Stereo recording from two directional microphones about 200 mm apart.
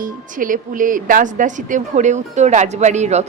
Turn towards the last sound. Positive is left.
turn(degrees=-35)  # may be behind; listen again after turning